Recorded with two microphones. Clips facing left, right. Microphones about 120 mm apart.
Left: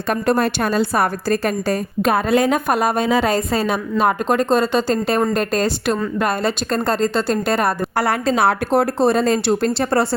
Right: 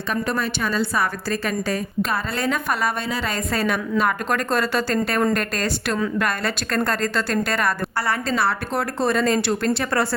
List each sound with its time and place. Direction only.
0.1 s a woman's voice: 45° left (ahead or behind)
3.5 s a woman's voice: 30° left (ahead or behind); by 8.9 s 45° left (ahead or behind)
9.0 s a woman's voice: 35° left (ahead or behind)